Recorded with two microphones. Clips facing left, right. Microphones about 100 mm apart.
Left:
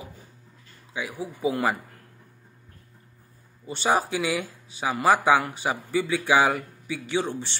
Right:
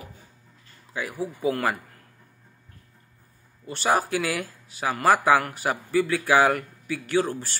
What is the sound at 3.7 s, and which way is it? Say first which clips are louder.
A man's voice: even; centre (ahead or behind).